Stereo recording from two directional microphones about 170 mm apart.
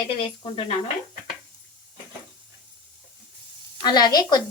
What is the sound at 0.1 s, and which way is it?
Speech, 35° left (ahead or behind).